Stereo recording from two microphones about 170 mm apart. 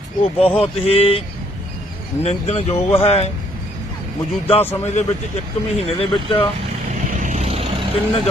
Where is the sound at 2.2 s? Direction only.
40° left (ahead or behind).